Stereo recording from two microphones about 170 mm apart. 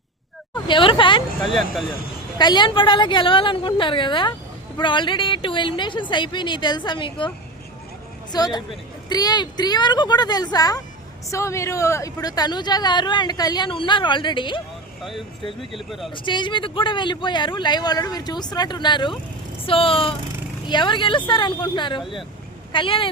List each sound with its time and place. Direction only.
0.7 s speech: 30° left (ahead or behind)
1.5 s speech: centre (ahead or behind)
2.4 s speech: 25° left (ahead or behind)
8.3 s speech: 25° left (ahead or behind)
15.7 s speech: centre (ahead or behind)
16.1 s speech: 30° left (ahead or behind)